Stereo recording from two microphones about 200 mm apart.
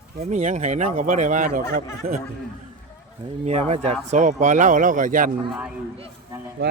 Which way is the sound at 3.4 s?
30° right (ahead or behind).